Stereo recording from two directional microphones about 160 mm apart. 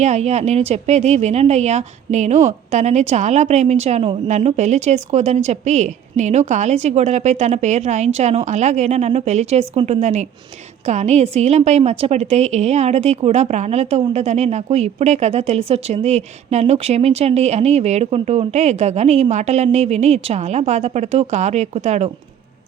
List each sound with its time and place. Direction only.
0.0 s speech: 45° right (ahead or behind)